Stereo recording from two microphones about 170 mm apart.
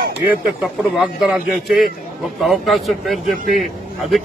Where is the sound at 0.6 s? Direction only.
5° right (ahead or behind).